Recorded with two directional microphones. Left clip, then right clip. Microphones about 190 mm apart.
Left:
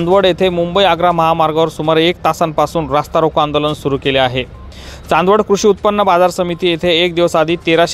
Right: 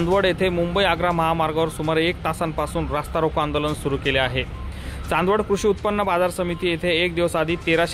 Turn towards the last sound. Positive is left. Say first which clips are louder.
# left 8 dB
turn(degrees=40)  # may be behind; listen again after turning